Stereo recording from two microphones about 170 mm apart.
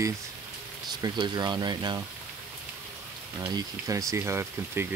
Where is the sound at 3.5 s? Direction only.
20° right (ahead or behind).